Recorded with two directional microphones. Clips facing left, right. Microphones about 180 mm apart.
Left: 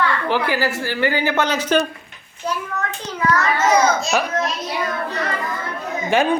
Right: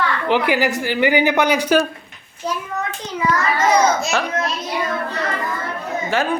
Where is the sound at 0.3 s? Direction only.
20° right (ahead or behind).